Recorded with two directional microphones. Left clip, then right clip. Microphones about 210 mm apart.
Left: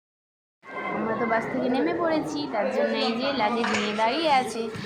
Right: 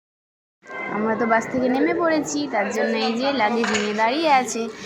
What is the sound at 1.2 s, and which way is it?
A woman's voice, 20° right (ahead or behind).